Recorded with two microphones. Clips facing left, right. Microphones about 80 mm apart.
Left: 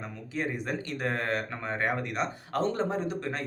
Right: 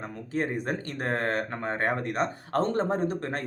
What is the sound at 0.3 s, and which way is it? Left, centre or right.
Speech, right.